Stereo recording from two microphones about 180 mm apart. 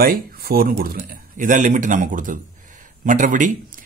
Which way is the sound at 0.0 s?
55° right (ahead or behind).